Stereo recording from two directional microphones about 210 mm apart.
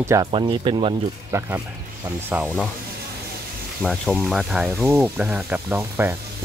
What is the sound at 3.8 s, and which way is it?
Speech, centre (ahead or behind).